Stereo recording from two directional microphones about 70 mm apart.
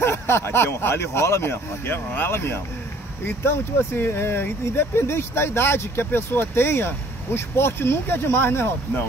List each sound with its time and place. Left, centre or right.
0.0 s speech: left